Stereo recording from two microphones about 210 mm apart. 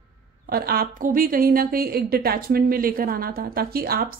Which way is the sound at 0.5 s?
45° right (ahead or behind).